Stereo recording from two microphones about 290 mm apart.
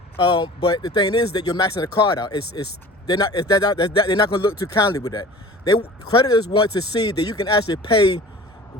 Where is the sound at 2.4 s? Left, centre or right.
Left.